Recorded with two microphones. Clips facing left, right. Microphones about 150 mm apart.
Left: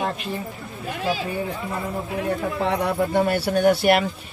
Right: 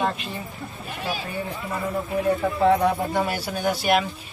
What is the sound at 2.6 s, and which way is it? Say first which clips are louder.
Speech: right 4 dB; 65° left (ahead or behind).